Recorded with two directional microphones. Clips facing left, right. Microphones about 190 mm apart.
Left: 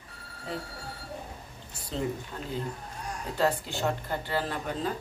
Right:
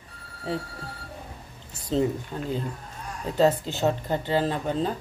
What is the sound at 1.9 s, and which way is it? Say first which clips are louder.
Speech: right 7 dB; 25° right (ahead or behind).